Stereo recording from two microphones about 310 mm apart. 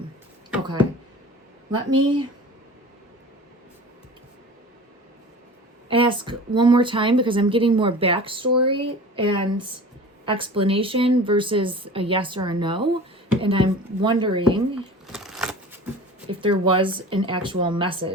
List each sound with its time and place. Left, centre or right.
1.7 s speech: centre
5.9 s speech: centre
15.1 s a sound: centre
16.3 s speech: centre